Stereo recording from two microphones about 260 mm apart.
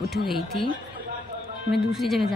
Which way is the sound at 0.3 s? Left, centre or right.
Centre.